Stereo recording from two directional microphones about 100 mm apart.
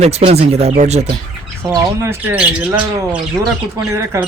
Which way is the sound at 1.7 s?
25° right (ahead or behind).